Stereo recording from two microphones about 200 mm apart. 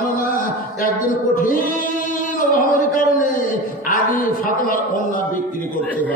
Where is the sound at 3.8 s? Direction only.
45° left (ahead or behind).